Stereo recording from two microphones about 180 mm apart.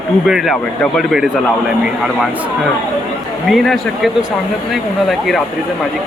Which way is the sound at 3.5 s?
Centre (ahead or behind).